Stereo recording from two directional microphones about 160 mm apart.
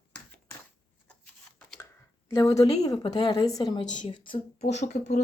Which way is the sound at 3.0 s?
25° left (ahead or behind).